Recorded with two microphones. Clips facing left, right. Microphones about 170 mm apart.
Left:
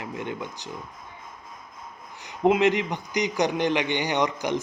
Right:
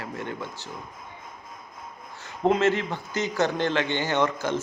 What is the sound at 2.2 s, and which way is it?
A man's voice, 15° left (ahead or behind).